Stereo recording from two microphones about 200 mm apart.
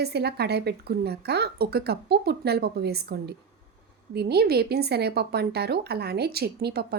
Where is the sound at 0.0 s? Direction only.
55° right (ahead or behind).